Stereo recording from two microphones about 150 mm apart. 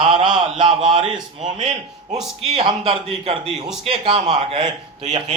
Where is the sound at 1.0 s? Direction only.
5° right (ahead or behind).